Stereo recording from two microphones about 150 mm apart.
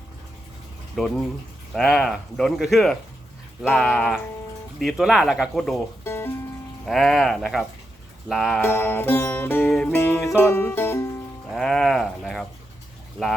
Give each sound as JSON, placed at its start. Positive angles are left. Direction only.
{"t": 1.7, "sound": "speech", "side_deg": 0}
{"t": 6.1, "sound": "music", "side_deg": 15}
{"t": 6.8, "sound": "speech", "side_deg": 0}
{"t": 8.6, "sound": "music", "side_deg": 15}
{"t": 11.5, "sound": "bird", "side_deg": 5}
{"t": 13.2, "sound": "speech", "side_deg": 0}